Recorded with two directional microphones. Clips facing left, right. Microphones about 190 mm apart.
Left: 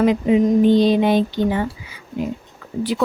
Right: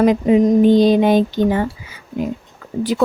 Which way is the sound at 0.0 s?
45° right (ahead or behind).